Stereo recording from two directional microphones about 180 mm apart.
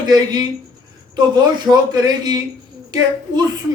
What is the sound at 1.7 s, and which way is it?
Speech, 20° right (ahead or behind).